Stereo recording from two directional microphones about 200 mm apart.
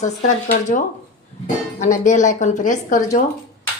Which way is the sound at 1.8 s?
35° left (ahead or behind).